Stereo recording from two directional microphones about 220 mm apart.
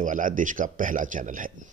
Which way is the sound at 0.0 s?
35° right (ahead or behind).